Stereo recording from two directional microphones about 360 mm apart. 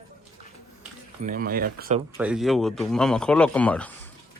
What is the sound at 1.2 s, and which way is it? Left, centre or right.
Speech, right.